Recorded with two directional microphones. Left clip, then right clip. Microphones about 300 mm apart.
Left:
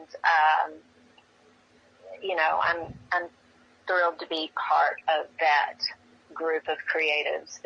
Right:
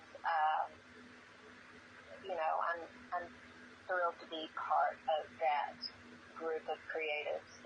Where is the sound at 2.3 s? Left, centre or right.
Left.